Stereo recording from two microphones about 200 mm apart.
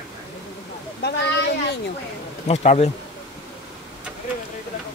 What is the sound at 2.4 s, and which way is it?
Speech, 35° left (ahead or behind).